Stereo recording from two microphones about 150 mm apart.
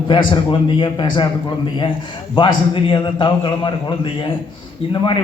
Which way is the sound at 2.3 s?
35° left (ahead or behind).